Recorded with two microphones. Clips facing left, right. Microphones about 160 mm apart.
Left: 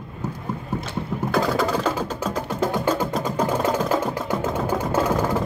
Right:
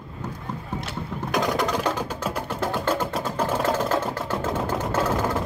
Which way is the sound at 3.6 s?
10° left (ahead or behind).